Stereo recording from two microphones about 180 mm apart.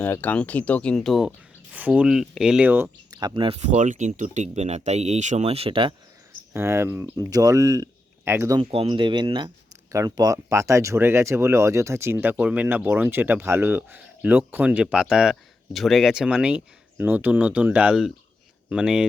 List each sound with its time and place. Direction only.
0.0 s speech: 10° left (ahead or behind); by 3.2 s 10° right (ahead or behind)
3.2 s speech: 25° right (ahead or behind)
3.6 s speech: 45° right (ahead or behind)
6.5 s speech: 15° right (ahead or behind)
8.6 s speech: 30° right (ahead or behind); by 19.0 s 5° right (ahead or behind)